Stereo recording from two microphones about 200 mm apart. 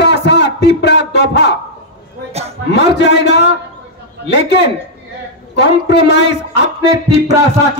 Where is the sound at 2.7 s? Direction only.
60° left (ahead or behind).